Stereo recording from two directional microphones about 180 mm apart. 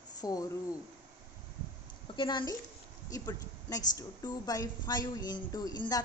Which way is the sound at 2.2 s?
25° left (ahead or behind).